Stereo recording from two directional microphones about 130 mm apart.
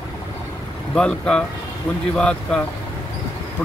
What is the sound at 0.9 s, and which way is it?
Speech, 5° left (ahead or behind).